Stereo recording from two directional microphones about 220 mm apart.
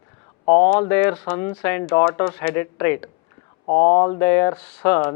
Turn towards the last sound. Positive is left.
turn(degrees=10)  # may be behind; listen again after turning